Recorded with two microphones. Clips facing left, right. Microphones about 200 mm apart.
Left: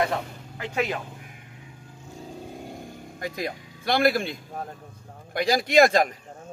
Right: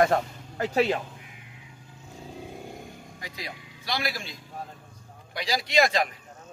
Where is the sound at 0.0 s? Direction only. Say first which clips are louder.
Right 4 dB; 50° right (ahead or behind).